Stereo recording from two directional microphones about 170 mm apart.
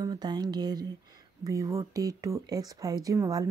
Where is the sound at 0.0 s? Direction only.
25° right (ahead or behind).